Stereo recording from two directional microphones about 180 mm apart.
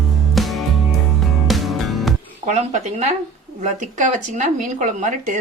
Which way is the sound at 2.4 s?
40° right (ahead or behind).